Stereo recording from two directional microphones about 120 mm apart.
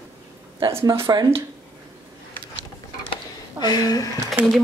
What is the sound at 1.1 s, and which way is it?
Speech, 30° right (ahead or behind).